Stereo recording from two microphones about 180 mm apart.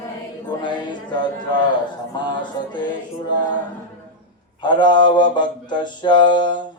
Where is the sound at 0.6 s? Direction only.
25° left (ahead or behind).